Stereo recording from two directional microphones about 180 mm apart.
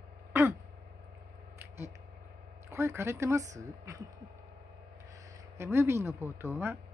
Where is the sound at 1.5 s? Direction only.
15° right (ahead or behind).